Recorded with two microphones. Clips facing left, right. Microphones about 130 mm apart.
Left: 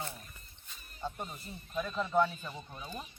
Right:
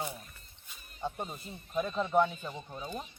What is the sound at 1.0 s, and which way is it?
Speech, 20° right (ahead or behind).